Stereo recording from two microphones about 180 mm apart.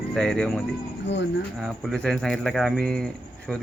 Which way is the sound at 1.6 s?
5° left (ahead or behind).